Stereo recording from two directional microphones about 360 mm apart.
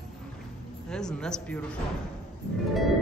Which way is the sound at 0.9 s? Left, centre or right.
Centre.